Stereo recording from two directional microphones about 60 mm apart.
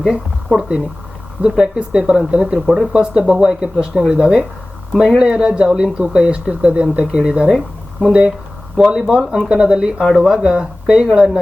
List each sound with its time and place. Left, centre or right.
0.0 s a woman's voice: centre
2.6 s speech: centre
2.9 s speech: centre